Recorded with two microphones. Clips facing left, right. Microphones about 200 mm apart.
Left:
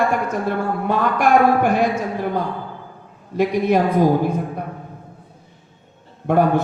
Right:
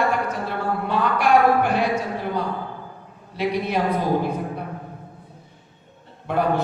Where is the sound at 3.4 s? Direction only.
50° left (ahead or behind).